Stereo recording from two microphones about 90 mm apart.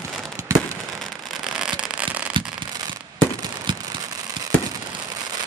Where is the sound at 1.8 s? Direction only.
15° right (ahead or behind).